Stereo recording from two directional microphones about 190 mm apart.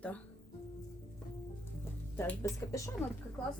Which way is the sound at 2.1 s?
10° left (ahead or behind).